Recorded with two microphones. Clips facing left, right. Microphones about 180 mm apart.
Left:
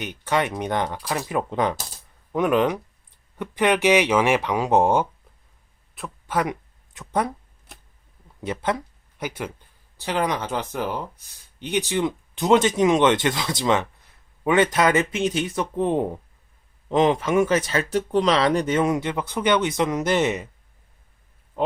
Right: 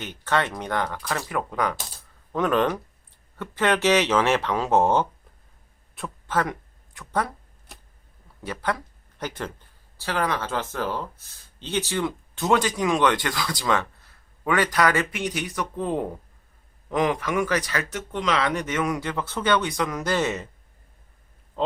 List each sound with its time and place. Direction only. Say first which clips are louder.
0.0 s speech: left 2 dB; 15° left (ahead or behind)
2.3 s speech: left 2 dB; 10° left (ahead or behind)
6.2 s a sound: left 1 dB; 15° left (ahead or behind)
8.4 s speech: left 3 dB; 20° left (ahead or behind)